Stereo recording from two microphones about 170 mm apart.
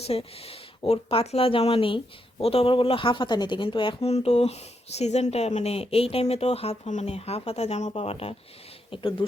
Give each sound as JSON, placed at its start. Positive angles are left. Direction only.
{"t": 0.0, "sound": "speech", "side_deg": 35}